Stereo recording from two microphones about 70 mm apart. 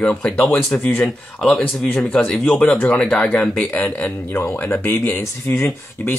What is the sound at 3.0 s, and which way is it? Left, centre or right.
Speech, centre.